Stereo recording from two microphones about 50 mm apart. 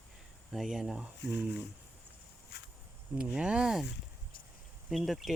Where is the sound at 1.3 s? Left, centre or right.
Right.